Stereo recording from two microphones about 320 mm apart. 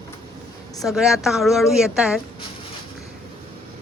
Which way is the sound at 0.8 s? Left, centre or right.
Centre.